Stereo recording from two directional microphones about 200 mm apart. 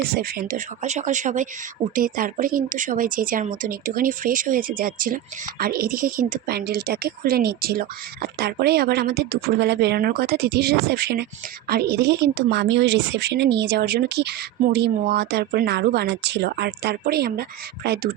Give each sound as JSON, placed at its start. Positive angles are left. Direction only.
{"t": 0.1, "sound": "a woman's voice", "side_deg": -45}